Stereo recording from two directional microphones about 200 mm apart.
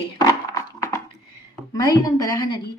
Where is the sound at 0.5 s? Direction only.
15° left (ahead or behind).